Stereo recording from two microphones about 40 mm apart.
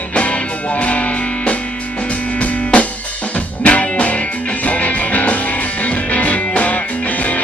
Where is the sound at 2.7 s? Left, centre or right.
Left.